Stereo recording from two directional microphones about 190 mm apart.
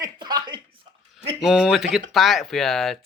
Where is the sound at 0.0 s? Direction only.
20° right (ahead or behind).